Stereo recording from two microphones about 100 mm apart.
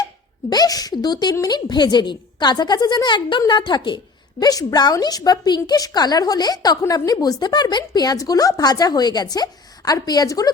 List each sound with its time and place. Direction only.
0.5 s a woman's voice: 40° left (ahead or behind)